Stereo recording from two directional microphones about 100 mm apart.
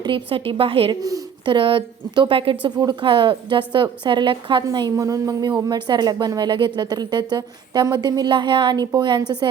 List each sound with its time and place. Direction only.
0.0 s speech: 60° right (ahead or behind)
2.7 s a woman's voice: 50° right (ahead or behind)